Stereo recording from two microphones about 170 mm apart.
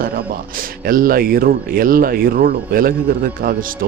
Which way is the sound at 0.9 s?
55° right (ahead or behind).